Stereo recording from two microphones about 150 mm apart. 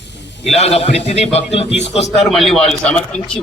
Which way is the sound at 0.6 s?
45° left (ahead or behind).